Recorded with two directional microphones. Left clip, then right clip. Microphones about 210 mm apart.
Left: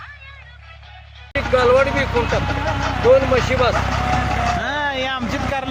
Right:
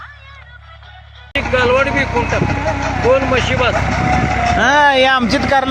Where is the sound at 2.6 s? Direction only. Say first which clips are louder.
Right 3 dB; 40° right (ahead or behind).